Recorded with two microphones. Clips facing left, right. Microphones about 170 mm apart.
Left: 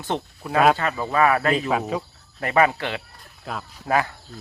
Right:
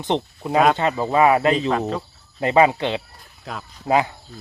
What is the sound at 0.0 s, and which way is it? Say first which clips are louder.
Speech: right 5 dB; 20° right (ahead or behind).